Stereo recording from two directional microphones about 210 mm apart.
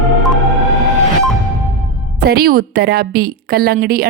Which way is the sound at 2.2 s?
45° right (ahead or behind).